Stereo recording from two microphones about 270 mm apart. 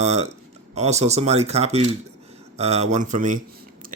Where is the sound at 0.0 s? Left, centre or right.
Right.